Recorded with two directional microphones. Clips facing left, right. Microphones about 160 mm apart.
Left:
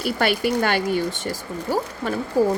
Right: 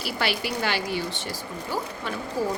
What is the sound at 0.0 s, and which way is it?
Speech, 50° left (ahead or behind).